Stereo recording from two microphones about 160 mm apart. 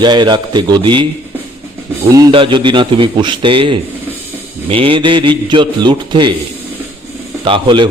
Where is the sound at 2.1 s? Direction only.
25° right (ahead or behind).